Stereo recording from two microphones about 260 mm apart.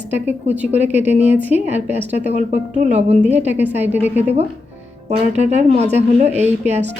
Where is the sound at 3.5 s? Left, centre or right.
Centre.